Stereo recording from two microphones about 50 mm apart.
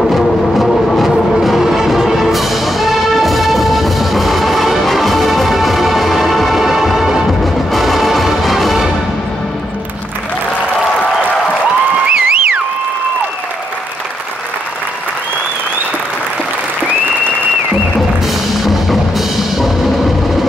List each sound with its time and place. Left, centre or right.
0.1 s music: centre
12.1 s a sound: centre
18.2 s music: centre